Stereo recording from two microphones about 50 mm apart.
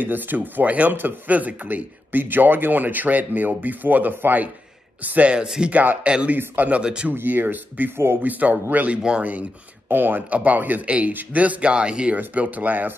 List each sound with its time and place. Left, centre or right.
0.0 s speech: right
5.3 s speech: centre
5.7 s speech: right
6.3 s speech: right
6.7 s speech: centre
7.2 s speech: right; by 12.2 s centre
12.4 s speech: right